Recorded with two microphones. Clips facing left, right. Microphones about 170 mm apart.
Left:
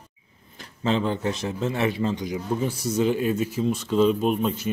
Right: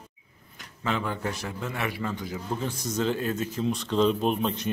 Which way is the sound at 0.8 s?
25° left (ahead or behind).